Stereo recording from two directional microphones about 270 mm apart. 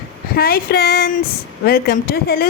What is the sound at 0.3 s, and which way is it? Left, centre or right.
A woman's voice, left.